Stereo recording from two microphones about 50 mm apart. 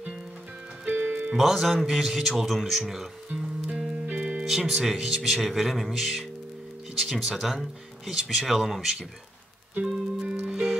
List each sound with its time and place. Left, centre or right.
0.8 s music: right
1.3 s a man's voice: centre
4.0 s music: right
4.5 s speech: centre
9.8 s music: centre